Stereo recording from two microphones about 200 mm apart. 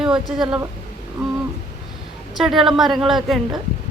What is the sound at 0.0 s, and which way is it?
Speech, 5° right (ahead or behind).